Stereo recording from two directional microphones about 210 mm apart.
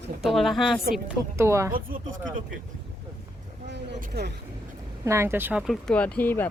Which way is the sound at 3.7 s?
50° right (ahead or behind).